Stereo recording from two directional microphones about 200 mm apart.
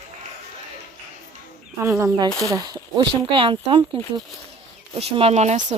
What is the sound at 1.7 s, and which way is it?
Speech, 15° right (ahead or behind).